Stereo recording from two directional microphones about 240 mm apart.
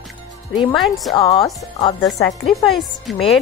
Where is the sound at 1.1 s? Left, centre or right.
Centre.